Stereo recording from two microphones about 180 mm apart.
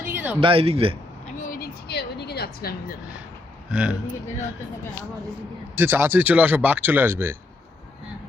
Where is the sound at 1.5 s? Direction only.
60° left (ahead or behind).